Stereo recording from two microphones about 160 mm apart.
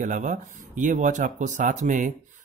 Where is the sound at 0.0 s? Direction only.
50° right (ahead or behind).